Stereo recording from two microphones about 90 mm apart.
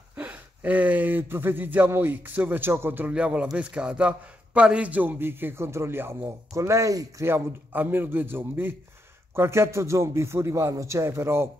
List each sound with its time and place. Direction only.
0.1 s a man's voice: 15° right (ahead or behind); by 7.2 s 40° right (ahead or behind)
7.2 s a man's voice: 25° right (ahead or behind)